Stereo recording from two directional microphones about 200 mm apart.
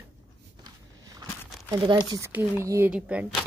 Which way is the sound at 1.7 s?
25° right (ahead or behind).